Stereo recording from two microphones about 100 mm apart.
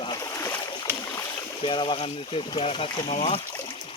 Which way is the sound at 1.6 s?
55° left (ahead or behind).